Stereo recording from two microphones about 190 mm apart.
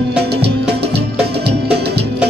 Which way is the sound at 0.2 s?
60° right (ahead or behind).